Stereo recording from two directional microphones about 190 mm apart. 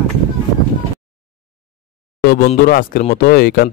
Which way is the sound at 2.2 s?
50° left (ahead or behind).